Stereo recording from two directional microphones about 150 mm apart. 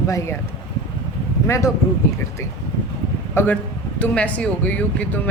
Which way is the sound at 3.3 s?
15° left (ahead or behind).